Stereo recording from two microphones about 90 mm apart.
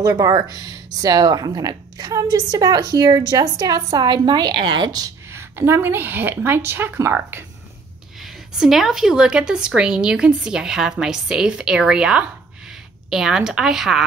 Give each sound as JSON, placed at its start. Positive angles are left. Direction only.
{"t": 0.0, "sound": "a woman's voice", "side_deg": -45}
{"t": 5.3, "sound": "a woman's voice", "side_deg": -25}
{"t": 8.2, "sound": "a woman's voice", "side_deg": -5}